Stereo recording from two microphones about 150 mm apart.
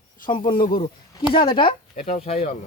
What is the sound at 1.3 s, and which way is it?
Speech, 35° left (ahead or behind).